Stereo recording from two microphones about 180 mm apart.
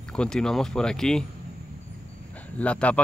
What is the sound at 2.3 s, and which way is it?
Speech, 10° left (ahead or behind).